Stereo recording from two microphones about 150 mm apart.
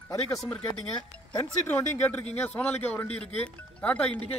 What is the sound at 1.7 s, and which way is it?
A man's voice, 10° left (ahead or behind).